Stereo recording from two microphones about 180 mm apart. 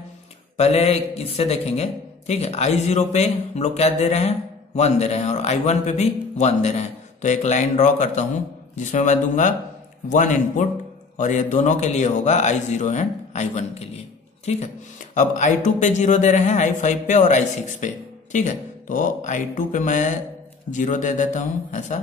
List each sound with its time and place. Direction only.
0.6 s a man's voice: 35° left (ahead or behind)